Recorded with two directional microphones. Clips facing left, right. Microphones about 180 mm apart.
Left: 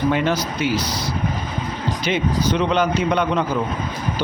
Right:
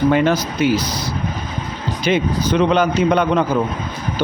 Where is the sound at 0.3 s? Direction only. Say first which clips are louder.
Right 4 dB; 45° right (ahead or behind).